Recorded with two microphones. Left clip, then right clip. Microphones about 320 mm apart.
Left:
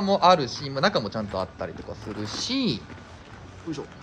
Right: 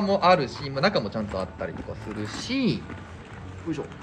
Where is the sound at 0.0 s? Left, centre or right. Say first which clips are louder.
Left 1 dB; centre.